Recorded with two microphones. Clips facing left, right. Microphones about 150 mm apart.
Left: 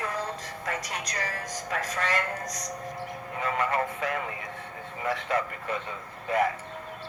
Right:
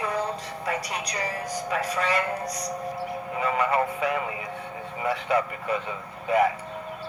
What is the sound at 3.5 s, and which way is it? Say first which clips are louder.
Speech: right 3 dB; 15° right (ahead or behind).